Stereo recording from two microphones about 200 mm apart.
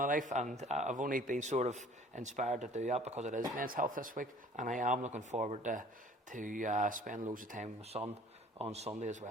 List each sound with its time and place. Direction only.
0.0 s speech: 40° right (ahead or behind)